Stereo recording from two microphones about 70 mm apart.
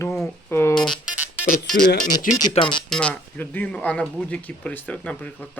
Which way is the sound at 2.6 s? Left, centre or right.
Centre.